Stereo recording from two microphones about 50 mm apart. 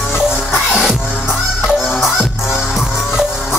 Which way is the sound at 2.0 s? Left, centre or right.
Centre.